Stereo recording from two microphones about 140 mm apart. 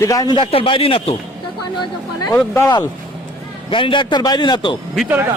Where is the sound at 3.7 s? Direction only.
35° left (ahead or behind).